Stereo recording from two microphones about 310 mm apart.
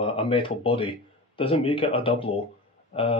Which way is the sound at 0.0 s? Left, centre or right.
Centre.